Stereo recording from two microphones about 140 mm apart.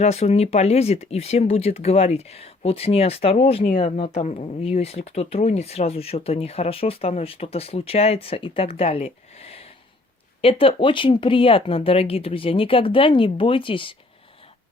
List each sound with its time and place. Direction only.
0.0 s speech: 50° left (ahead or behind)